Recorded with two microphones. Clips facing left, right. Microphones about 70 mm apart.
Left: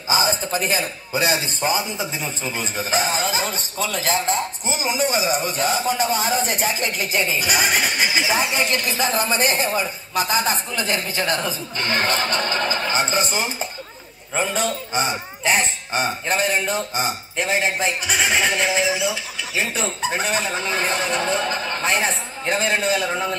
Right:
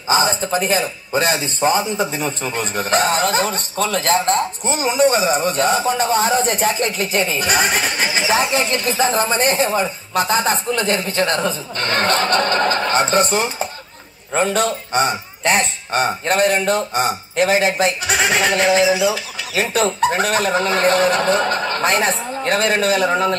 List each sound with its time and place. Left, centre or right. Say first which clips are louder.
0.1 s a man's voice: right 4 dB; right
8.6 s a man's voice: right 4 dB; right
17.4 s a man's voice: right 6 dB; right